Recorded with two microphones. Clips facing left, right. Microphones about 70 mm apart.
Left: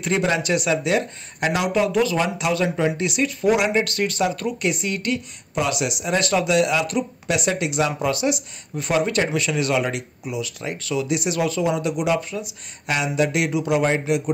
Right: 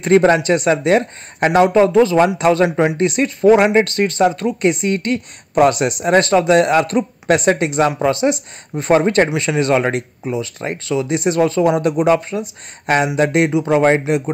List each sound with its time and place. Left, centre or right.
0.0 s speech: right
2.2 s speech: right